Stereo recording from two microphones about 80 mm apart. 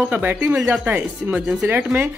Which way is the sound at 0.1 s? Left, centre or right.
Right.